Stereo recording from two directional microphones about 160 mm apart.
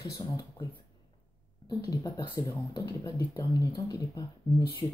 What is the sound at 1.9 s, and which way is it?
Speech, 25° left (ahead or behind).